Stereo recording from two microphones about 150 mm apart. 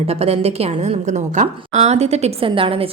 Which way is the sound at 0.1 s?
40° right (ahead or behind).